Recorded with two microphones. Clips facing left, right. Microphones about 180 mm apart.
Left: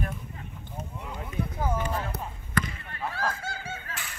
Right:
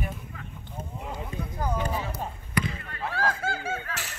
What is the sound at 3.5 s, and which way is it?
Fowl, 85° right.